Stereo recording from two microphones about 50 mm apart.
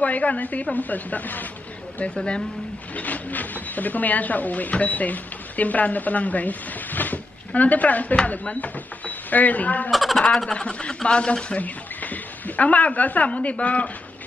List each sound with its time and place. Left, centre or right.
0.0 s a woman's voice: left
2.1 s speech: centre
2.9 s speech: left
9.8 s speech: centre
10.4 s speech: centre